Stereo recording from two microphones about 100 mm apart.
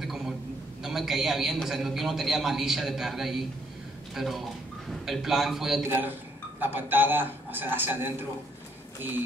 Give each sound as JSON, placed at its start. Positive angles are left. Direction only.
{"t": 0.0, "sound": "a sound", "side_deg": -5}
{"t": 0.8, "sound": "a man's voice", "side_deg": -5}
{"t": 5.9, "sound": "a man's voice", "side_deg": -20}